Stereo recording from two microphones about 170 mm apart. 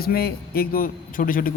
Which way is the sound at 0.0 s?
65° left (ahead or behind).